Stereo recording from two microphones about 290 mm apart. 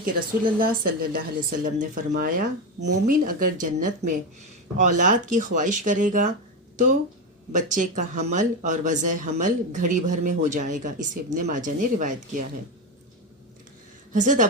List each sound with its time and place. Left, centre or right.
0.0 s speech: right
7.5 s speech: right
14.1 s speech: right